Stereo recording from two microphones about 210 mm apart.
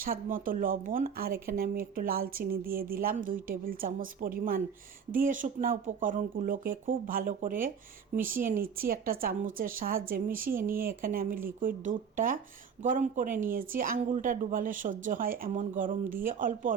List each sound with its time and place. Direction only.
0.0 s speech: 45° right (ahead or behind)